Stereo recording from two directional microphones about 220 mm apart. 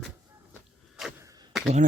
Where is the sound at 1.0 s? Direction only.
5° right (ahead or behind).